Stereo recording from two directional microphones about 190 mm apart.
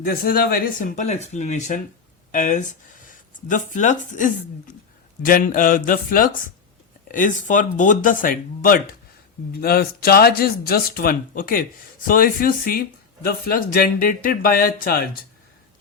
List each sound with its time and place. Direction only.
0.0 s speech: 50° left (ahead or behind)